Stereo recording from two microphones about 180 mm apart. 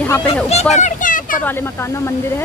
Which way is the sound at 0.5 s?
40° left (ahead or behind).